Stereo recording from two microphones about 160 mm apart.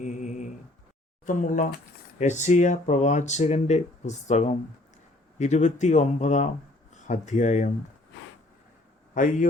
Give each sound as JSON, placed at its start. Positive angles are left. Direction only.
{"t": 0.0, "sound": "a sound", "side_deg": 50}
{"t": 1.3, "sound": "speech", "side_deg": 50}
{"t": 9.1, "sound": "speech", "side_deg": 55}